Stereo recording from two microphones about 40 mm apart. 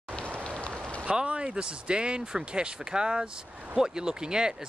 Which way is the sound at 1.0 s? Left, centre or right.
Right.